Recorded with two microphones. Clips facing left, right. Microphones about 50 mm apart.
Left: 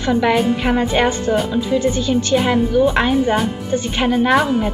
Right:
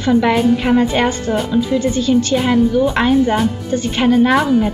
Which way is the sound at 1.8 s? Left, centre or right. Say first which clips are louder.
Right 1 dB; left.